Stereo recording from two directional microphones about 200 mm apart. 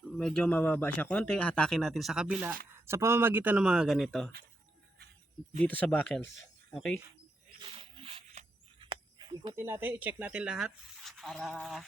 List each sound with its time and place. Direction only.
0.2 s speech: 5° left (ahead or behind)
5.6 s speech: 10° left (ahead or behind)
7.6 s a sound: 25° right (ahead or behind)
9.6 s speech: 10° right (ahead or behind)